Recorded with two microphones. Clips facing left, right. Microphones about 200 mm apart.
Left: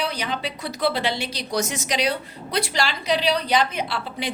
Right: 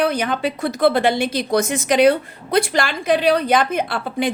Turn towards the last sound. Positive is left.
turn(degrees=-50)  # may be behind; listen again after turning